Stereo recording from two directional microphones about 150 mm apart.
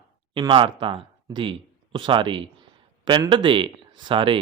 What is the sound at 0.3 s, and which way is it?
Speech, 35° right (ahead or behind).